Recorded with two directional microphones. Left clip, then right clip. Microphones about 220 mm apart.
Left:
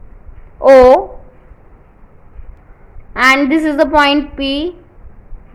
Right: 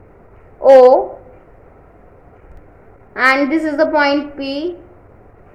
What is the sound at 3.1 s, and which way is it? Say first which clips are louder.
A woman's voice: left 3 dB; 30° left (ahead or behind).